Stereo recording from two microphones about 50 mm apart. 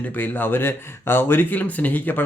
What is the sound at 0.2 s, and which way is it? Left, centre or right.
Speech, left.